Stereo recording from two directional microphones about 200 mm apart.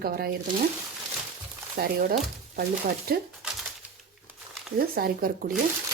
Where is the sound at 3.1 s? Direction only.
50° right (ahead or behind).